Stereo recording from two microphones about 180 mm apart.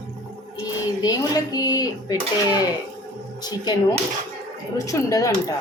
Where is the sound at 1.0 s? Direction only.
20° left (ahead or behind).